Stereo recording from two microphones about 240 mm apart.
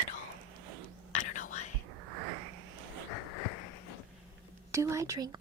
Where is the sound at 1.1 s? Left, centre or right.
Left.